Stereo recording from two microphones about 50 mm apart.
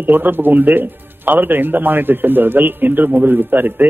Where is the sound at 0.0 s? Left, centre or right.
Right.